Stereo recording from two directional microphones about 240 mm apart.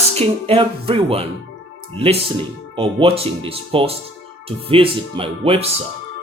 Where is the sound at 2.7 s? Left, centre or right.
Right.